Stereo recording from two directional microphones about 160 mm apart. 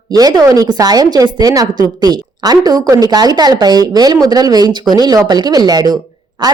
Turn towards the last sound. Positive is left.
turn(degrees=-30)  # may be behind; listen again after turning